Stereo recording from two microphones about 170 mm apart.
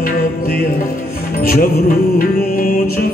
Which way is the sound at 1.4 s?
60° left (ahead or behind).